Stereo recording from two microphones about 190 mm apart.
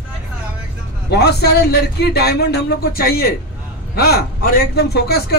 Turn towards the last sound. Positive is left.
turn(degrees=55)  # may be behind; listen again after turning